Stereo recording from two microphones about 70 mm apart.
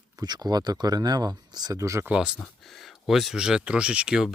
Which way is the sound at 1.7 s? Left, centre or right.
Right.